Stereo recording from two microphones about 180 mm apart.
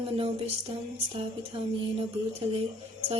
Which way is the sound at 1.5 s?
30° right (ahead or behind).